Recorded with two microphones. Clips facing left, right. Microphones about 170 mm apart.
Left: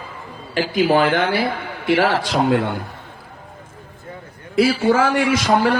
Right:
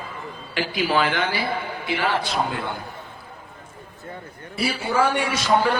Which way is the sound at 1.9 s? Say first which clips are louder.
Left 8 dB; 80° left.